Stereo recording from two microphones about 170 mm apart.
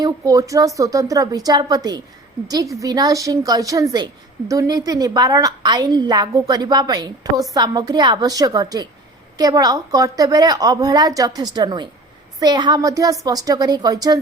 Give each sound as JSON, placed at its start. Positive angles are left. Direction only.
{"t": 0.0, "sound": "a woman's voice", "side_deg": -20}